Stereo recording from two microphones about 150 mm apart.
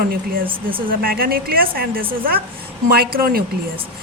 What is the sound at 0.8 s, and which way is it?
A woman's voice, 80° right.